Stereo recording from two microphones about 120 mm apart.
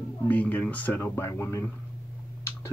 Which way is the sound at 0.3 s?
15° left (ahead or behind).